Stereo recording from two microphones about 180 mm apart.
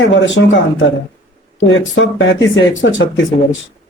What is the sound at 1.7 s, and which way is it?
Speech, 90° left.